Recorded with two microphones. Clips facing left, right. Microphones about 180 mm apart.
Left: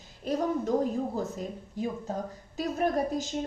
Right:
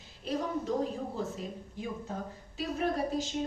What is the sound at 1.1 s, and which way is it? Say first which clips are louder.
A woman's voice: left 3 dB; 40° left (ahead or behind).